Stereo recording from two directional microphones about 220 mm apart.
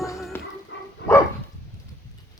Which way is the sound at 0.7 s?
55° left (ahead or behind).